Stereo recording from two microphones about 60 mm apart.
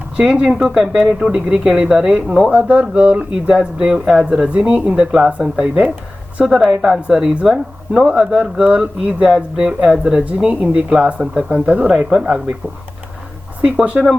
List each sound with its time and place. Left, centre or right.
0.2 s speech: centre
2.5 s speech: right
11.9 s speech: centre
14.0 s speech: right